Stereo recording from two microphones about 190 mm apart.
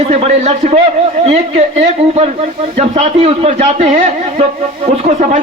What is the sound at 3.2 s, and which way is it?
Speech, 30° right (ahead or behind).